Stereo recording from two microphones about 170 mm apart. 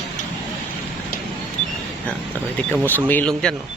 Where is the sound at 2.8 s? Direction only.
10° left (ahead or behind).